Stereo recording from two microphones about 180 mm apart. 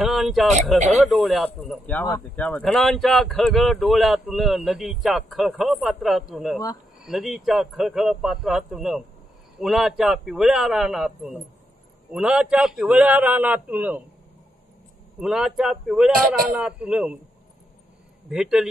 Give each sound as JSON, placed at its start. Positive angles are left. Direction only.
{"t": 0.0, "sound": "speech", "side_deg": 0}
{"t": 15.1, "sound": "speech", "side_deg": -5}
{"t": 16.1, "sound": "a man's voice", "side_deg": -55}
{"t": 16.5, "sound": "speech", "side_deg": -5}
{"t": 18.3, "sound": "speech", "side_deg": -5}